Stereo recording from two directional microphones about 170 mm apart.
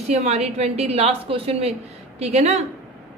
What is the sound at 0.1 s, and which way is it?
A woman's voice, 40° right (ahead or behind).